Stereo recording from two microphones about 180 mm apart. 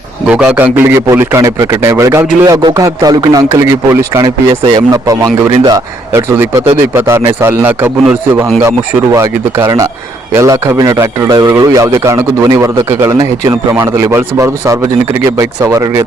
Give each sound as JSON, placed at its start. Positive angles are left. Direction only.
{"t": 0.3, "sound": "a man's voice", "side_deg": -5}